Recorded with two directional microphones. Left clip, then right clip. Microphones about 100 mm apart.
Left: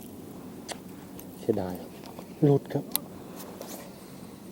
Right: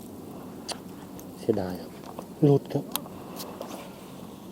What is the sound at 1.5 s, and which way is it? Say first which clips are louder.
Speech: right 1 dB; 30° left (ahead or behind).